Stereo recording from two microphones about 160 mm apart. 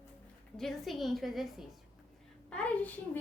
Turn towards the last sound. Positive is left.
turn(degrees=10)  # may be behind; listen again after turning